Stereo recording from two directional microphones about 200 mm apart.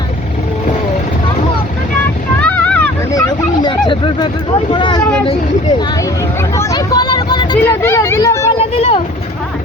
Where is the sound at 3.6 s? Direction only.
20° left (ahead or behind).